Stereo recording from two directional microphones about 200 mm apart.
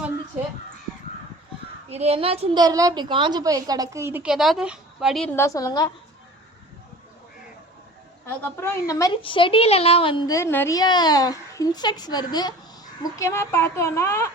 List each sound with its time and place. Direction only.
1.9 s a woman's voice: 30° right (ahead or behind)
2.6 s a woman's voice: 20° right (ahead or behind); by 5.3 s centre (ahead or behind)
5.4 s a woman's voice: 15° left (ahead or behind)
8.3 s a woman's voice: 15° left (ahead or behind)